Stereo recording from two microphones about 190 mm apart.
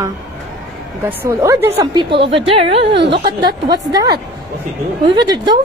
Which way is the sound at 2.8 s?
65° right (ahead or behind).